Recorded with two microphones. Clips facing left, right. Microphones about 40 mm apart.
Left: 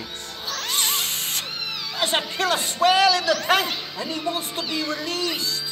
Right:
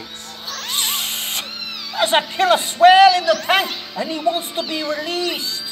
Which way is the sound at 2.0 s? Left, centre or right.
Centre.